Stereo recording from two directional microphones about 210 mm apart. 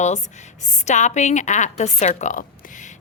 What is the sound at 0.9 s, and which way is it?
A woman's voice, 35° left (ahead or behind).